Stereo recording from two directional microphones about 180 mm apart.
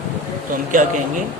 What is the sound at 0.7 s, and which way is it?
Speech, 45° right (ahead or behind).